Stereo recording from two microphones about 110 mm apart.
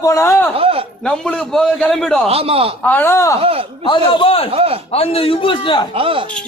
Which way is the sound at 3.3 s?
60° right (ahead or behind).